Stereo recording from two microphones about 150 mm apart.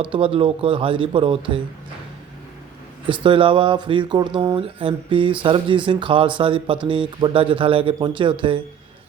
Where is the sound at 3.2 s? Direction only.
35° right (ahead or behind).